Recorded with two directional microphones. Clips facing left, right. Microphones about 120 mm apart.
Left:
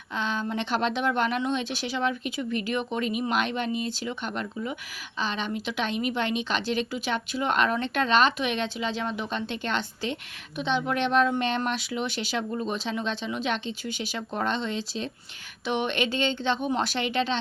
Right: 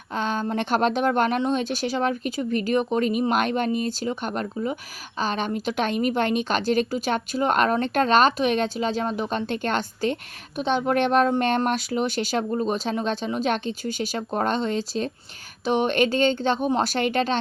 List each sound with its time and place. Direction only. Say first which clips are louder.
0.1 s speech: right 4 dB; 45° right (ahead or behind)